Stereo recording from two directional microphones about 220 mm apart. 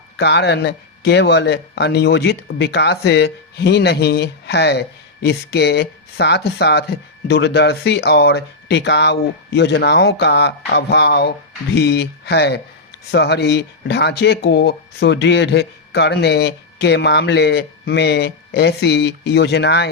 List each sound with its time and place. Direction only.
0.2 s speech: 50° left (ahead or behind)